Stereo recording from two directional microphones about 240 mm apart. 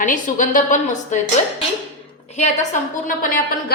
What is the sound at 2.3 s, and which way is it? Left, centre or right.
A woman's voice, left.